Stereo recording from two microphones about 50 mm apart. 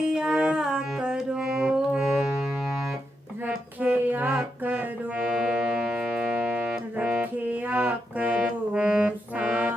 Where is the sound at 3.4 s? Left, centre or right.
Right.